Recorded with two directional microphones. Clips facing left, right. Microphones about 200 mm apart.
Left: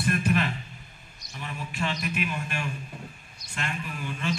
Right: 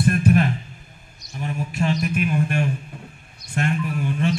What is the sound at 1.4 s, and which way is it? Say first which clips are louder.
A man's voice: right 8 dB; 45° right (ahead or behind).